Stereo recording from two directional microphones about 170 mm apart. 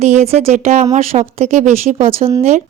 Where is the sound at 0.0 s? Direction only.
40° right (ahead or behind).